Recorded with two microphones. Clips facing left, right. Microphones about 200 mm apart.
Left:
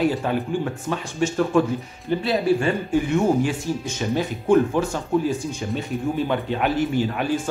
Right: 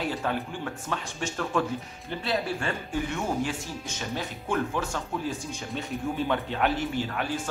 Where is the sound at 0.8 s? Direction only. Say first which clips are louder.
Left 9 dB; 10° left (ahead or behind).